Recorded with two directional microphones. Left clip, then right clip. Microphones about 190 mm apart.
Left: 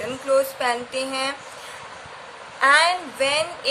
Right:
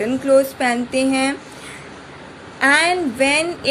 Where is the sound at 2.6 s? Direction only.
20° right (ahead or behind).